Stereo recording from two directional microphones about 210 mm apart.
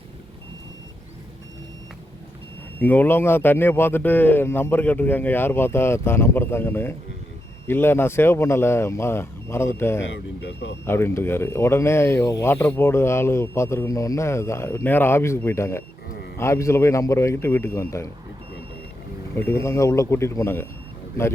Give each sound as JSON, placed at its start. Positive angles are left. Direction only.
{"t": 2.8, "sound": "speech", "side_deg": 10}
{"t": 10.1, "sound": "speech", "side_deg": 55}
{"t": 10.8, "sound": "speech", "side_deg": 10}
{"t": 19.4, "sound": "speech", "side_deg": 10}